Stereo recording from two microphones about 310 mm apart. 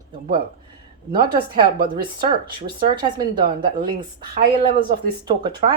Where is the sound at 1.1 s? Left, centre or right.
Centre.